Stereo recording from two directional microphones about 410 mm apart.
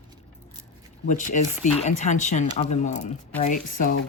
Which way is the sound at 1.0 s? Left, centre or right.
Centre.